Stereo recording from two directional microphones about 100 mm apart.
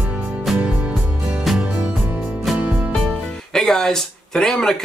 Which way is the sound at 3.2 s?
5° left (ahead or behind).